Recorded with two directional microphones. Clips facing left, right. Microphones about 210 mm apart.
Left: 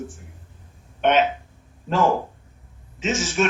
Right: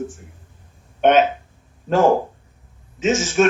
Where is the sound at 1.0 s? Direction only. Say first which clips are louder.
Right 4 dB; 45° right (ahead or behind).